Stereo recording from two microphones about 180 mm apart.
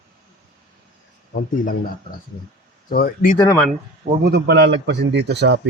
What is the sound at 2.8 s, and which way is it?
Speech, 55° left (ahead or behind).